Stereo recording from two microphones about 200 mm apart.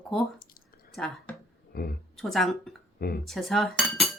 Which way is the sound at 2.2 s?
Centre (ahead or behind).